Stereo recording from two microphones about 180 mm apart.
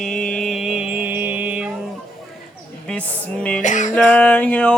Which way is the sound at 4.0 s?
5° left (ahead or behind).